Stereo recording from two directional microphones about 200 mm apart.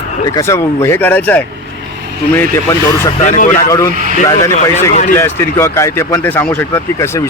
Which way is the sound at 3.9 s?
40° right (ahead or behind).